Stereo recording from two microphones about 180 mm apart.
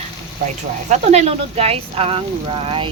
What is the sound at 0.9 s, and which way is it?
Speech, 35° right (ahead or behind).